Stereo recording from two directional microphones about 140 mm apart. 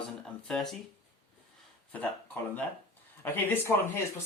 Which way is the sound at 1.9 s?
10° left (ahead or behind).